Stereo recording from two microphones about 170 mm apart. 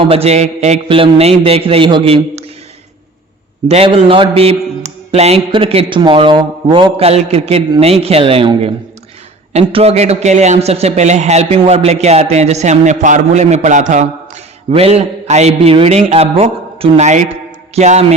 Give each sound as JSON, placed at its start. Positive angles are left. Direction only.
{"t": 0.1, "sound": "a man's voice", "side_deg": -35}
{"t": 3.7, "sound": "a man's voice", "side_deg": -35}
{"t": 14.7, "sound": "a man's voice", "side_deg": -35}